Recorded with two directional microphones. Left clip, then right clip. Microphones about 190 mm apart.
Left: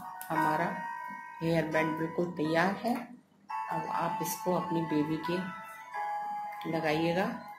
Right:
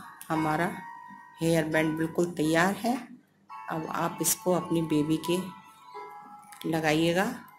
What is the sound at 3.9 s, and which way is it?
Speech, 45° right (ahead or behind).